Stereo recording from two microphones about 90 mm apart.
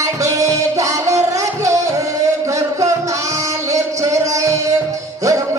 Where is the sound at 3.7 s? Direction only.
35° right (ahead or behind).